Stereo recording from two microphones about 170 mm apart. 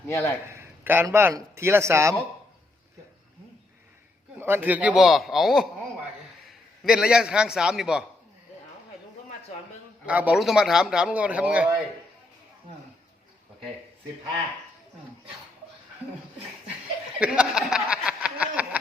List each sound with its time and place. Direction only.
0.1 s a man's voice: 15° left (ahead or behind)
0.4 s a man's voice: 15° right (ahead or behind)
4.4 s a man's voice: 15° right (ahead or behind)
10.1 s a man's voice: 10° right (ahead or behind)
17.2 s a sound: 5° right (ahead or behind)